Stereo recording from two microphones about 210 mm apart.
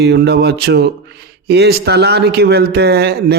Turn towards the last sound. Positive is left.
turn(degrees=-50)  # may be behind; listen again after turning